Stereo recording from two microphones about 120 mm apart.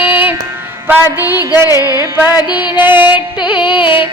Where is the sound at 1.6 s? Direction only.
30° left (ahead or behind).